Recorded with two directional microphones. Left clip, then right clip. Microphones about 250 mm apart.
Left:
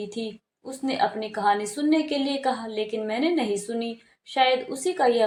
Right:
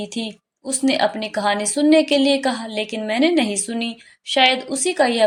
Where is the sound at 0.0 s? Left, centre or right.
Right.